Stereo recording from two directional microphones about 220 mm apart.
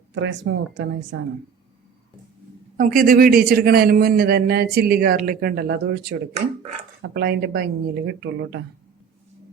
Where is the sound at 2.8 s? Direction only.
40° right (ahead or behind).